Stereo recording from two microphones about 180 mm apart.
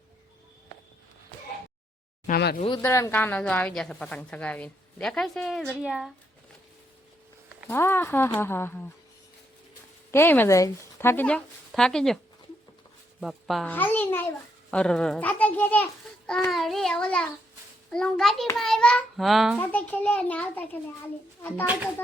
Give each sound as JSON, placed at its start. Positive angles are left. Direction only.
{"t": 2.2, "sound": "speech", "side_deg": 60}
{"t": 2.6, "sound": "speech", "side_deg": 25}
{"t": 2.8, "sound": "a woman's voice", "side_deg": 15}
{"t": 7.7, "sound": "speech", "side_deg": 10}
{"t": 10.1, "sound": "speech", "side_deg": 10}
{"t": 13.7, "sound": "a woman's voice", "side_deg": 10}
{"t": 19.5, "sound": "speech", "side_deg": 10}